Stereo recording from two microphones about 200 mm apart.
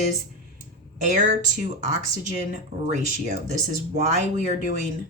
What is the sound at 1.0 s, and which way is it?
Speech, 40° right (ahead or behind).